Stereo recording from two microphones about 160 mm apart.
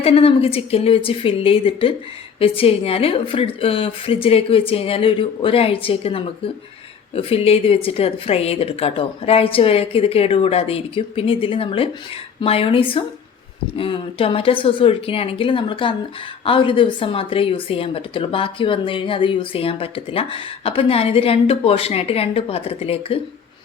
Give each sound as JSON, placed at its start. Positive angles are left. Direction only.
{"t": 0.0, "sound": "speech", "side_deg": 35}